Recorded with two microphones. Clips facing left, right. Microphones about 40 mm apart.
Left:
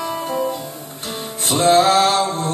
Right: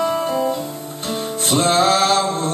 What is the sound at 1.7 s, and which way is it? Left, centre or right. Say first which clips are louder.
Mantra: left 1 dB; left.